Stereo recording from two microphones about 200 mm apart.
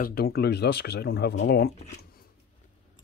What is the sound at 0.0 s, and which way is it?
Speech, 50° left (ahead or behind).